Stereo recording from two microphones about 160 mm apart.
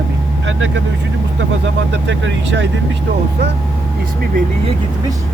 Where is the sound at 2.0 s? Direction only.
90° right.